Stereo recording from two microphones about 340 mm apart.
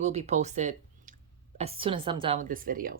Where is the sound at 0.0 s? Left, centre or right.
Centre.